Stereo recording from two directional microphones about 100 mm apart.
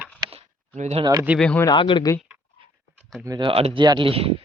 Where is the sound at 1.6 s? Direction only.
50° left (ahead or behind).